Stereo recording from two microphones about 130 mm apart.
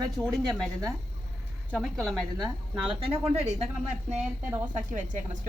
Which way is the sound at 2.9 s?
45° right (ahead or behind).